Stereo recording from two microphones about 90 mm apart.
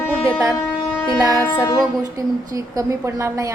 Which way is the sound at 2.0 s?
40° right (ahead or behind).